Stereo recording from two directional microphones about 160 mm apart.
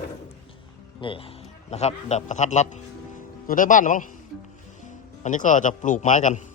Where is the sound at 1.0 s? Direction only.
35° left (ahead or behind); by 4.1 s 55° left (ahead or behind).